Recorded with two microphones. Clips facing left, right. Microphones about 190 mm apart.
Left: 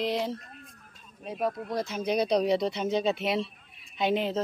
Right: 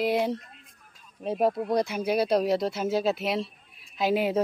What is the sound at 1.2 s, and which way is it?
Speech, 30° right (ahead or behind).